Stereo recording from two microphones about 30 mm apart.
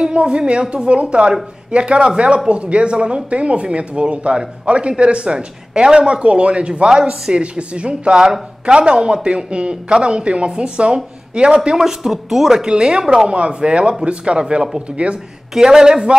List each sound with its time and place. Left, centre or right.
0.0 s speech: right
6.9 s speech: right
8.2 s speech: right
8.7 s speech: right
11.7 s speech: centre
12.6 s speech: right
13.3 s speech: right
14.9 s speech: right